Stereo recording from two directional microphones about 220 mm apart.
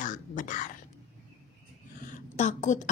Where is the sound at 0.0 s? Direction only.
35° left (ahead or behind).